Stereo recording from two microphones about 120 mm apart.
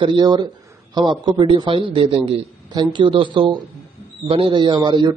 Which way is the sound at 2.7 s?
40° right (ahead or behind).